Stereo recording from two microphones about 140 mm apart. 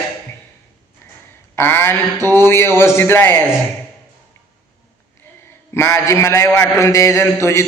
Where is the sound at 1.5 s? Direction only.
15° left (ahead or behind).